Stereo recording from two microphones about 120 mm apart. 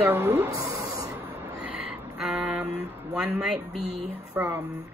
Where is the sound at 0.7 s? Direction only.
30° right (ahead or behind).